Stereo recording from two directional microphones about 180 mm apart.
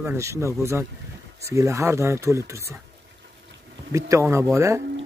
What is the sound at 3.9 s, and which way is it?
Speech, 15° right (ahead or behind).